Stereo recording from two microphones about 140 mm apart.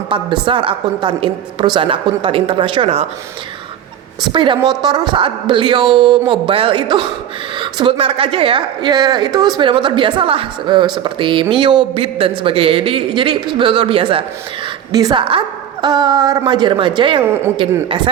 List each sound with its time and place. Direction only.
0.1 s a woman's voice: 35° right (ahead or behind)
4.2 s a woman's voice: 35° right (ahead or behind)
17.2 s speech: 15° right (ahead or behind)
17.8 s a woman's voice: 35° right (ahead or behind)